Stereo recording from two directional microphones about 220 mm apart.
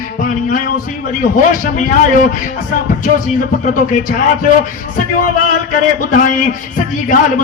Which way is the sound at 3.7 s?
35° left (ahead or behind).